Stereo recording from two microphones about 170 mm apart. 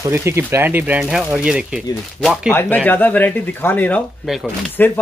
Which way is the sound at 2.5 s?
10° left (ahead or behind).